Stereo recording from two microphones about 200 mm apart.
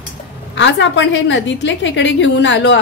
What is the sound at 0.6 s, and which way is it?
A woman's voice, 65° left (ahead or behind).